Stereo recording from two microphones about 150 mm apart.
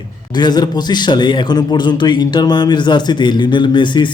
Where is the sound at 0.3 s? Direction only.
30° left (ahead or behind).